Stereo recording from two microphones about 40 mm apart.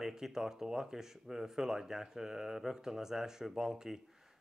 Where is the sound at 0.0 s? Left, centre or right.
Centre.